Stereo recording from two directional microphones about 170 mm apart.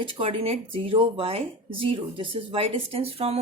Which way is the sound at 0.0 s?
35° right (ahead or behind).